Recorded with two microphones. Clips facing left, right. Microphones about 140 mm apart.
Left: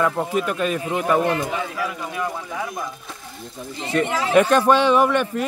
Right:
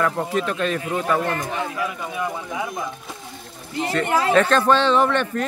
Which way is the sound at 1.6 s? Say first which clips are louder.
Even; centre (ahead or behind).